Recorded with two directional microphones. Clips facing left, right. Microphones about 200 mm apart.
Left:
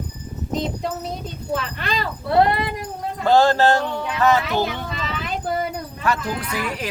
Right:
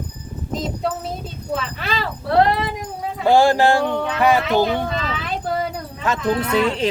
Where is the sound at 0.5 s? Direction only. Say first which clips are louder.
Right 1 dB; centre (ahead or behind).